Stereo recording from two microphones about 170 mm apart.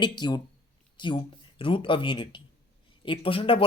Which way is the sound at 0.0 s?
25° left (ahead or behind).